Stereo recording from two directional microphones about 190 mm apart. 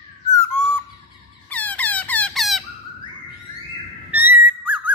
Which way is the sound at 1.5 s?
10° left (ahead or behind).